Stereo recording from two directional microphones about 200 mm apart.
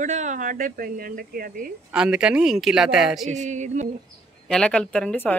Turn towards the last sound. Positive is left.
turn(degrees=10)  # may be behind; listen again after turning